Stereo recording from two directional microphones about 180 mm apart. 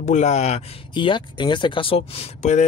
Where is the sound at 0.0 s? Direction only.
40° left (ahead or behind).